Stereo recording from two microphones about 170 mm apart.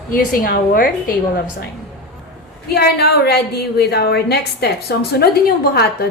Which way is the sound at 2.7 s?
70° left (ahead or behind).